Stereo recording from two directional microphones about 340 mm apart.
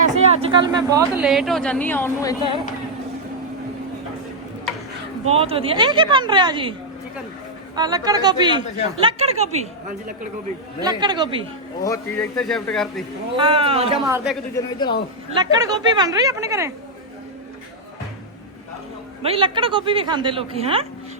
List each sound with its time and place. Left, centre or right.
0.0 s a woman's voice: centre
5.2 s a woman's voice: centre
7.8 s a woman's voice: centre
10.8 s a woman's voice: centre
11.8 s a woman's voice: centre
13.3 s a woman's voice: centre
14.5 s speech: centre
15.4 s a woman's voice: centre
19.2 s a woman's voice: centre